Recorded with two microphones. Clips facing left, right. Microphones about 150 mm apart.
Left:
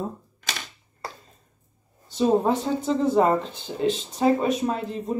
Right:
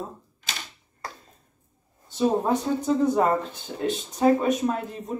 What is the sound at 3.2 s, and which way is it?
Speech, 20° left (ahead or behind).